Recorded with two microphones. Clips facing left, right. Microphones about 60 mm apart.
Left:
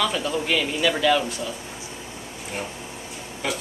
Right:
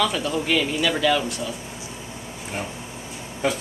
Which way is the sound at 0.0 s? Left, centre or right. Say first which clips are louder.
Right 1 dB; centre.